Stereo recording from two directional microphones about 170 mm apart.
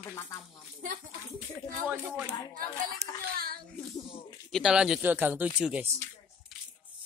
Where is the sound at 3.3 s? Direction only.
60° right (ahead or behind).